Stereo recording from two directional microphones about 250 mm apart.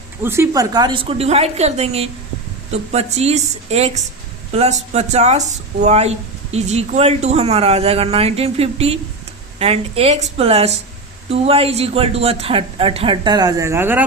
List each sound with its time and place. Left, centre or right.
0.2 s speech: centre